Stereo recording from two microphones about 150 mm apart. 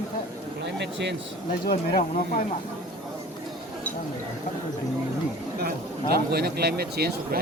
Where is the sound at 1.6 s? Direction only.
90° left.